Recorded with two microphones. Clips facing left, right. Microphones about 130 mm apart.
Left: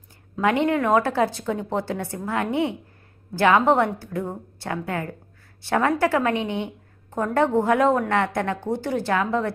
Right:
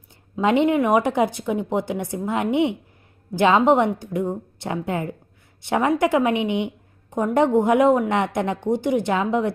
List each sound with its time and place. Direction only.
0.3 s a woman's voice: 15° right (ahead or behind)